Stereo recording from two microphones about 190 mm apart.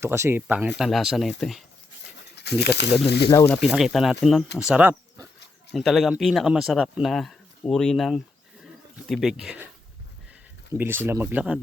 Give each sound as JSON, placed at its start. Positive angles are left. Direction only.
{"t": 0.0, "sound": "speech", "side_deg": -15}
{"t": 2.3, "sound": "speech", "side_deg": 60}
{"t": 3.5, "sound": "speech", "side_deg": 0}
{"t": 8.6, "sound": "a sound", "side_deg": 0}
{"t": 10.8, "sound": "speech", "side_deg": -10}